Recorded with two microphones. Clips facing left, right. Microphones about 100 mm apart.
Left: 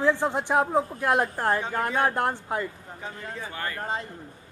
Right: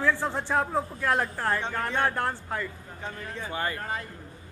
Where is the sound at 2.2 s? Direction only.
20° left (ahead or behind).